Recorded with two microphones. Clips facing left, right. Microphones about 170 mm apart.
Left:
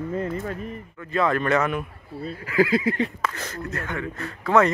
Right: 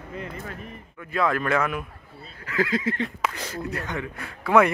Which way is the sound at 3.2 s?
15° right (ahead or behind).